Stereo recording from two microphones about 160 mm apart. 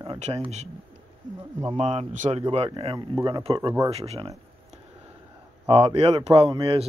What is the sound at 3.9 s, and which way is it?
Speech, 40° right (ahead or behind).